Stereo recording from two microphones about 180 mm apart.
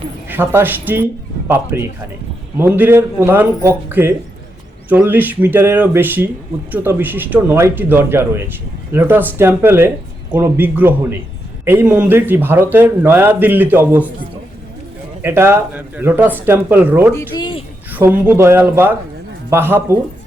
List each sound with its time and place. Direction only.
0.3 s speech: 10° right (ahead or behind)
15.2 s speech: 15° right (ahead or behind)
17.2 s a sound: 25° left (ahead or behind)
17.9 s speech: 10° right (ahead or behind)